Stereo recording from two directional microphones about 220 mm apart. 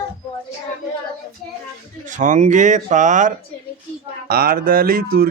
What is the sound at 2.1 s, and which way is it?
Speech, 35° right (ahead or behind).